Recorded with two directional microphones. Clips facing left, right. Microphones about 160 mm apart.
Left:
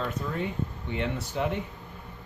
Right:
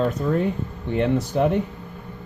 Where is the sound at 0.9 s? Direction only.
45° right (ahead or behind).